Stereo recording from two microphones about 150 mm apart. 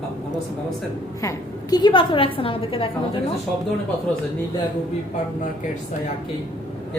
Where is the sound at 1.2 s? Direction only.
25° left (ahead or behind).